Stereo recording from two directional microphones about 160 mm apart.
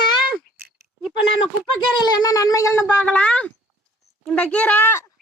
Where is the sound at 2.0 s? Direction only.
25° left (ahead or behind).